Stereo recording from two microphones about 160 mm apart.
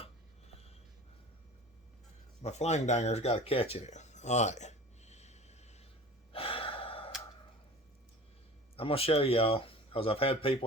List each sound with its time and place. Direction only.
2.4 s a sound: 45° left (ahead or behind)
6.3 s gasp: 35° left (ahead or behind)
8.7 s speech: 35° left (ahead or behind)